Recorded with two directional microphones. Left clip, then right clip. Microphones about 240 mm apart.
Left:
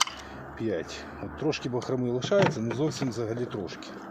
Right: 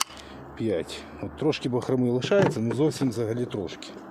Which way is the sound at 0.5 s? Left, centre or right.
Right.